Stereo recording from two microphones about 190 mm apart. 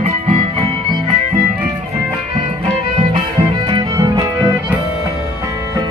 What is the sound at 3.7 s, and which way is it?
Music, 20° right (ahead or behind).